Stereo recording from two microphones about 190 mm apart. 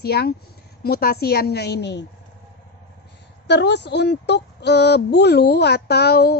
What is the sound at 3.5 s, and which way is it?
A woman's voice, 65° left (ahead or behind).